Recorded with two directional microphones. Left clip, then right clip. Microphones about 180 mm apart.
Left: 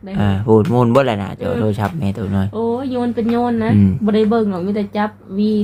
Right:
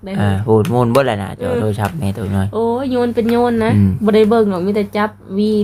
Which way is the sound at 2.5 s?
65° right (ahead or behind).